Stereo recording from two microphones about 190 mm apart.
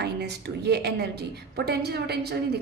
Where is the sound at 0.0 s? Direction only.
60° right (ahead or behind).